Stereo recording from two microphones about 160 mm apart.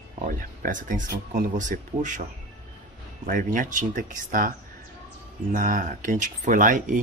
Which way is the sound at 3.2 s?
55° right (ahead or behind).